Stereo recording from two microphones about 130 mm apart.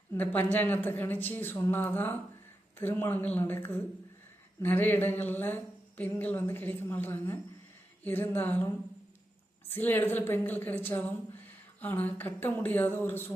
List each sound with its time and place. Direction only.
0.1 s a woman's voice: 15° left (ahead or behind)
9.6 s a woman's voice: 15° left (ahead or behind)